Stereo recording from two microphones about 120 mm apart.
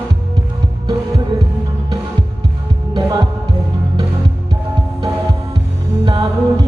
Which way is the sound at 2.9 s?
35° right (ahead or behind).